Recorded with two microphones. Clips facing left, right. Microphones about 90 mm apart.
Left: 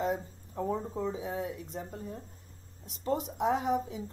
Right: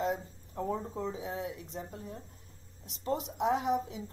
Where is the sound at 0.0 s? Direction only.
5° left (ahead or behind).